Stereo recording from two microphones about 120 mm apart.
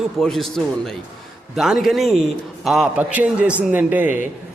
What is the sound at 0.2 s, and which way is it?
A man's voice, centre (ahead or behind).